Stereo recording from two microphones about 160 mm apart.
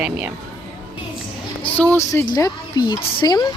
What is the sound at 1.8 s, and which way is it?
Speech, 15° left (ahead or behind).